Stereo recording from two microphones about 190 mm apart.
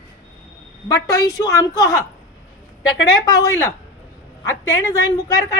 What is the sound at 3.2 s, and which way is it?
A woman's voice, 20° left (ahead or behind).